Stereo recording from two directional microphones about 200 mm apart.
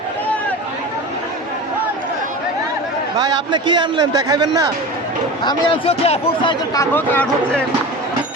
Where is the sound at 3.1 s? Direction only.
20° right (ahead or behind).